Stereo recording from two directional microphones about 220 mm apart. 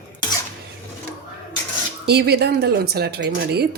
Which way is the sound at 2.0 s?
45° right (ahead or behind).